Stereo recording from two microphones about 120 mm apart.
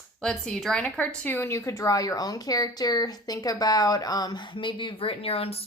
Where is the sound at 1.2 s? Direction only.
20° left (ahead or behind).